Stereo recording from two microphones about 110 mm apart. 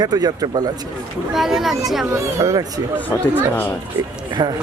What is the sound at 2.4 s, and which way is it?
Speech, 30° right (ahead or behind).